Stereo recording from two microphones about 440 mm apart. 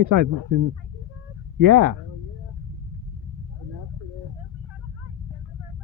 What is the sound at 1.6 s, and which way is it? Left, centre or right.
Speech, right.